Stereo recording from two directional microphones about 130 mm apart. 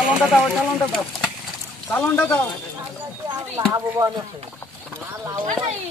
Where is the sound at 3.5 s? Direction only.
25° right (ahead or behind).